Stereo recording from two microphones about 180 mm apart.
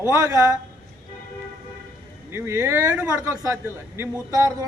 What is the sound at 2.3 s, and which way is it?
A man's voice, 15° right (ahead or behind).